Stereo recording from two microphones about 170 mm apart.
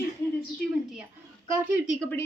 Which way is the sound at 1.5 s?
10° right (ahead or behind).